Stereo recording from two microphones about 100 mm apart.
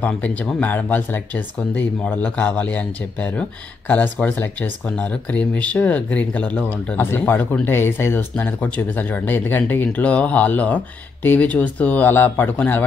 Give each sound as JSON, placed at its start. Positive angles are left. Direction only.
{"t": 0.0, "sound": "speech", "side_deg": 15}